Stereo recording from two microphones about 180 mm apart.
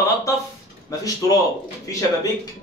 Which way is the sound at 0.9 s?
20° left (ahead or behind).